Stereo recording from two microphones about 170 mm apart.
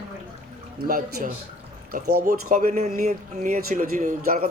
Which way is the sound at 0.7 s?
60° right (ahead or behind).